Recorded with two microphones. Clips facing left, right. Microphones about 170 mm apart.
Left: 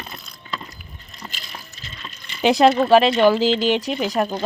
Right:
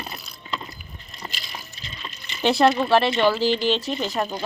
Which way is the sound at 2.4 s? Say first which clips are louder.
Left 3 dB; 15° left (ahead or behind).